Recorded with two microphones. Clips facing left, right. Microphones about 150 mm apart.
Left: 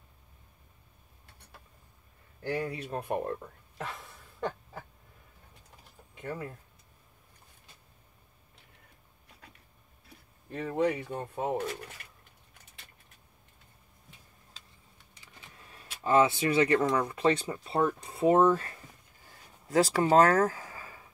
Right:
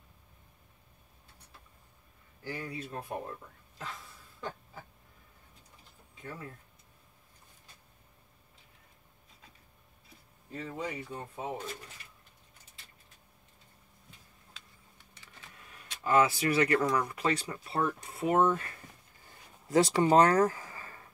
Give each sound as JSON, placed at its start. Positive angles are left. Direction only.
{"t": 2.4, "sound": "speech", "side_deg": 65}
{"t": 3.7, "sound": "a sound", "side_deg": 65}
{"t": 6.1, "sound": "speech", "side_deg": 65}
{"t": 10.0, "sound": "speech", "side_deg": 60}
{"t": 15.5, "sound": "speech", "side_deg": 30}
{"t": 19.7, "sound": "speech", "side_deg": 0}